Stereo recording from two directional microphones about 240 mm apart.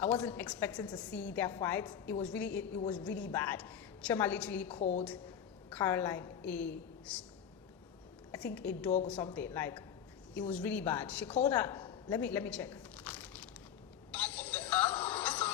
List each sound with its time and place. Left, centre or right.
0.0 s a woman's voice: centre
4.8 s a woman's voice: left
5.7 s a woman's voice: centre
8.3 s a woman's voice: centre
12.0 s a sound: centre
14.2 s music: centre